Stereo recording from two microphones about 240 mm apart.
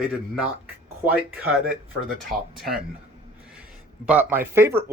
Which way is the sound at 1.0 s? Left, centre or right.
Centre.